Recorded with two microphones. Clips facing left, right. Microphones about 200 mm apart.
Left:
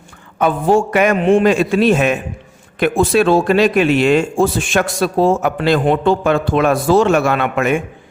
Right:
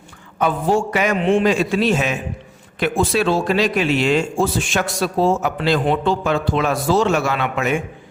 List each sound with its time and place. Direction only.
0.3 s speech: 55° left (ahead or behind)